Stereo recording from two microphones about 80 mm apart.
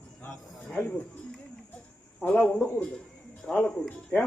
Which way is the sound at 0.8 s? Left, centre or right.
Left.